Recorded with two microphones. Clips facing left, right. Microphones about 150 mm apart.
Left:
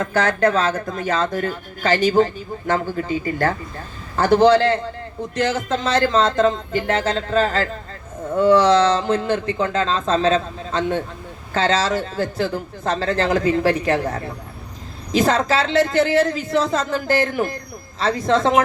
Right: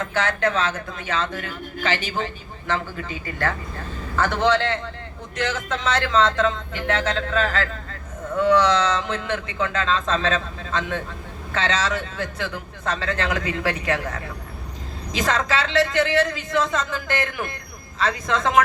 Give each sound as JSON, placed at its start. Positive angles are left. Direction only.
{"t": 0.0, "sound": "a man's voice", "side_deg": 40}